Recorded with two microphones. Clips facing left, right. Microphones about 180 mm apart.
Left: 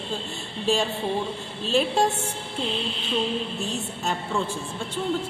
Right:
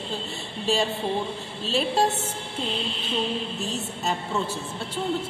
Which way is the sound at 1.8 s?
Centre (ahead or behind).